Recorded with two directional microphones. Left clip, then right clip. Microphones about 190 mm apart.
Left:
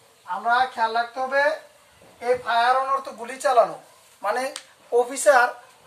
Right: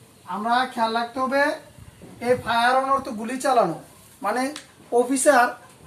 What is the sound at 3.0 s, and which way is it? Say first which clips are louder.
Speech: even; 20° left (ahead or behind).